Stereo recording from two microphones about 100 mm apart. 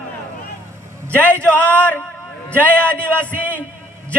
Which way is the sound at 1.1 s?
15° left (ahead or behind).